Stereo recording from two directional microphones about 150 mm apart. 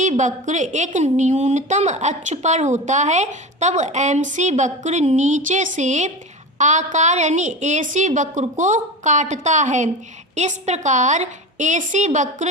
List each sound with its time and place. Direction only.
0.0 s a woman's voice: 55° right (ahead or behind)